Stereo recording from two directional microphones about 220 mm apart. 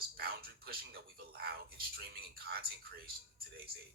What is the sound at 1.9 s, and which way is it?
Speech, 45° right (ahead or behind).